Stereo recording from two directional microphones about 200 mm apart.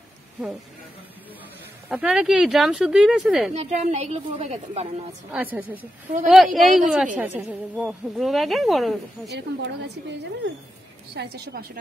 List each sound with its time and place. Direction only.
1.9 s speech: 5° right (ahead or behind)
3.5 s a woman's voice: 35° right (ahead or behind)
5.3 s a woman's voice: 10° right (ahead or behind)
9.3 s a woman's voice: 60° right (ahead or behind)
11.1 s a woman's voice: 50° right (ahead or behind)